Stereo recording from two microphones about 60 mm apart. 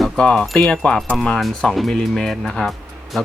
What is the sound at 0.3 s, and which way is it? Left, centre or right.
Speech, centre.